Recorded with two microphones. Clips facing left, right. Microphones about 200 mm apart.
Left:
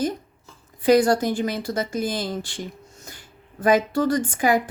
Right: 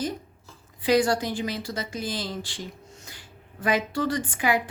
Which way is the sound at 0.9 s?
45° left (ahead or behind).